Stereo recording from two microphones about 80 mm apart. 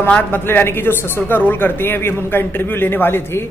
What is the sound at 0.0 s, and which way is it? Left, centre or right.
A man's voice, left.